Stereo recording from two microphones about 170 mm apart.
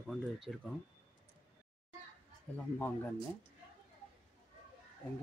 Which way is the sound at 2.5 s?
10° left (ahead or behind).